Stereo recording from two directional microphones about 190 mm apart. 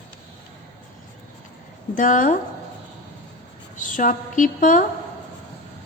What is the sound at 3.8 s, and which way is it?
A woman's voice, 45° left (ahead or behind).